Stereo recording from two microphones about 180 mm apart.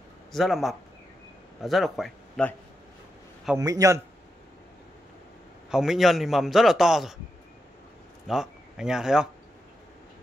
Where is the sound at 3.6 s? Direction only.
20° right (ahead or behind).